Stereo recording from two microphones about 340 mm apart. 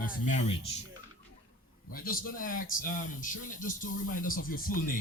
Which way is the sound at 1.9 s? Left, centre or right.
Left.